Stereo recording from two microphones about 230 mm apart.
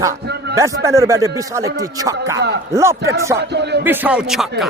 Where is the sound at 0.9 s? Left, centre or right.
Centre.